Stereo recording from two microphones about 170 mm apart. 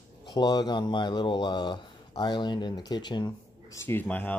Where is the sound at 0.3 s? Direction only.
25° left (ahead or behind).